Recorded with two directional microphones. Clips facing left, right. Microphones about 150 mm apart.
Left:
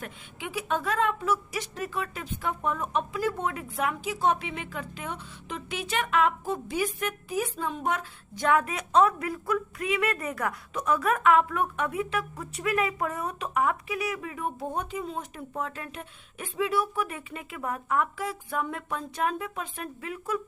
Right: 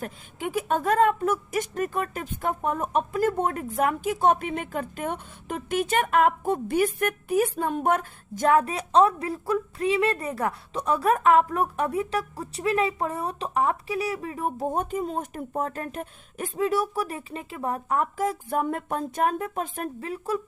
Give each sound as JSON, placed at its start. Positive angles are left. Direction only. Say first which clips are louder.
{"t": 0.0, "sound": "a woman's voice", "louder": "right 6 dB", "side_deg": -45}